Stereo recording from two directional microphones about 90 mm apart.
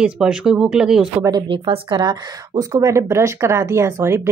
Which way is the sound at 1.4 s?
75° right (ahead or behind).